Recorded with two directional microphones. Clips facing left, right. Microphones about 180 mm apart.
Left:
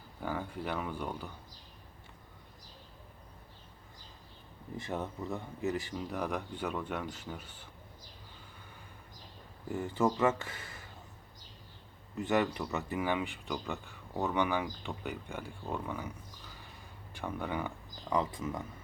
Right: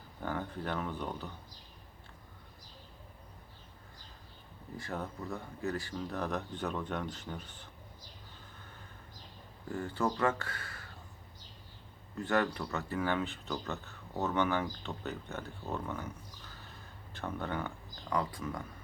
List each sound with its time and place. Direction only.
0.2 s speech: 10° left (ahead or behind)
4.8 s speech: 25° left (ahead or behind)
9.6 s speech: 20° left (ahead or behind)
12.1 s speech: 15° left (ahead or behind)
18.1 s speech: 20° left (ahead or behind)